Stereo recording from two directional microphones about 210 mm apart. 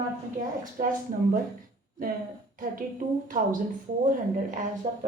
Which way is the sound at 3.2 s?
40° right (ahead or behind).